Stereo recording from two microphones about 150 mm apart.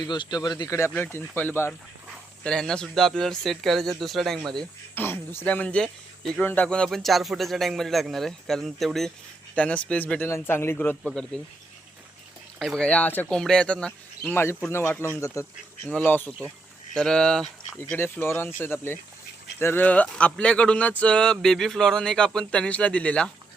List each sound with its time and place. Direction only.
0.0 s speech: 30° left (ahead or behind)
0.9 s speech: 10° left (ahead or behind)
5.0 s speech: 15° left (ahead or behind)
12.5 s speech: centre (ahead or behind); by 15.5 s 20° left (ahead or behind)
15.9 s speech: 10° left (ahead or behind)